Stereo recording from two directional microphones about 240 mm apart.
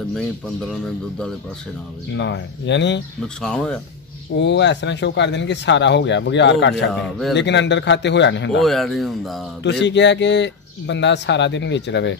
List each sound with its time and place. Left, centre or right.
2.1 s speech: left
3.4 s speech: centre
4.4 s speech: left
6.9 s speech: centre
7.3 s speech: left
8.5 s speech: centre
9.6 s speech: left